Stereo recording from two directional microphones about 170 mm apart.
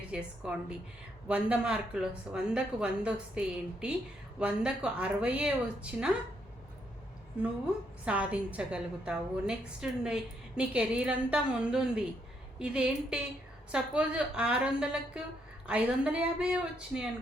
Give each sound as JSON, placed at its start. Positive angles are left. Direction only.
{"t": 0.1, "sound": "a woman's voice", "side_deg": -5}
{"t": 8.0, "sound": "a woman's voice", "side_deg": -5}